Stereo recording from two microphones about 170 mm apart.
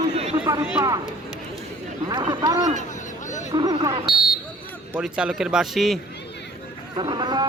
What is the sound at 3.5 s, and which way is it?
Speech, 25° right (ahead or behind).